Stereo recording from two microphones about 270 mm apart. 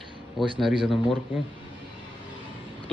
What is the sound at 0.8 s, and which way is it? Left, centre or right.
Speech, centre.